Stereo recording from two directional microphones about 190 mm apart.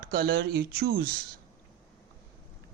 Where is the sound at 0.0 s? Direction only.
55° right (ahead or behind).